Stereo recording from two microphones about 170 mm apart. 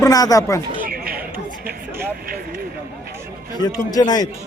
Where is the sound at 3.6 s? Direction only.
25° left (ahead or behind).